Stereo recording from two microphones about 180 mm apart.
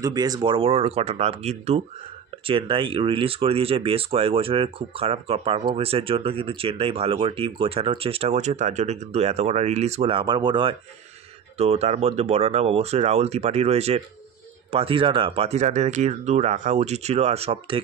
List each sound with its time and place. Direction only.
0.0 s speech: 20° right (ahead or behind)